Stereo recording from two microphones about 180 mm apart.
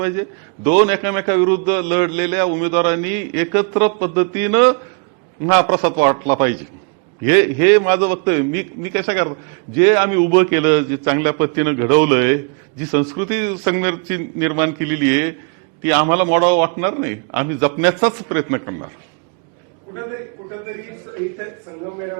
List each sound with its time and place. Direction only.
0.0 s a man's voice: 15° right (ahead or behind)